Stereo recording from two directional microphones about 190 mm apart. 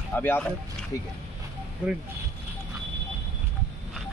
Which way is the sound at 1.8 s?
5° right (ahead or behind).